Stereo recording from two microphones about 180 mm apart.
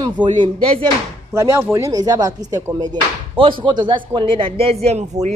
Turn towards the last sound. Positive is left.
turn(degrees=-40)  # may be behind; listen again after turning